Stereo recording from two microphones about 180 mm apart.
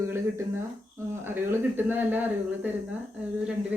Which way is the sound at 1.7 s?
10° right (ahead or behind).